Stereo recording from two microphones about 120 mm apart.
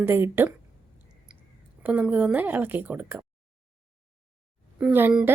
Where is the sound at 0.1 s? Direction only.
20° right (ahead or behind).